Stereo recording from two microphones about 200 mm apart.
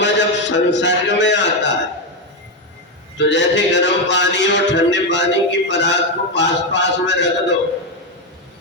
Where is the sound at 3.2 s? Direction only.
65° left (ahead or behind).